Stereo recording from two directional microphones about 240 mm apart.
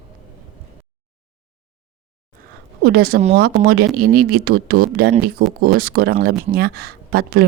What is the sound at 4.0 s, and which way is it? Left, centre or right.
A woman's voice, right.